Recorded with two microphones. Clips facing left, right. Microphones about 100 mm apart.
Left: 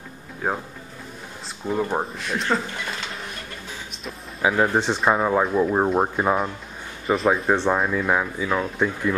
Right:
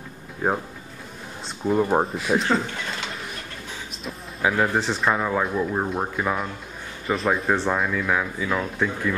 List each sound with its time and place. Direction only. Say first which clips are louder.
1.7 s speech: right 4 dB; 5° right (ahead or behind)
4.4 s speech: left 2 dB; 15° left (ahead or behind)
7.1 s speech: left 3 dB; centre (ahead or behind)
7.5 s speech: left 2 dB; 20° left (ahead or behind)